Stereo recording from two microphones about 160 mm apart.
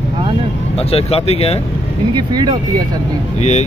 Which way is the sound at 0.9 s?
40° left (ahead or behind).